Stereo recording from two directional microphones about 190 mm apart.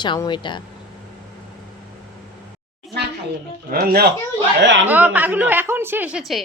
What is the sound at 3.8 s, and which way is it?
Speech, 50° right (ahead or behind).